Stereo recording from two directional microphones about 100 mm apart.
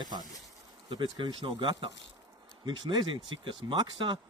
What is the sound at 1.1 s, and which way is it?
Speech, 55° right (ahead or behind).